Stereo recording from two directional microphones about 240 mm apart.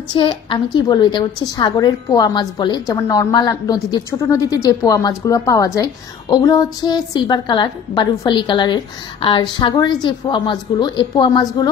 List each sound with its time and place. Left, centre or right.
0.1 s a woman's voice: centre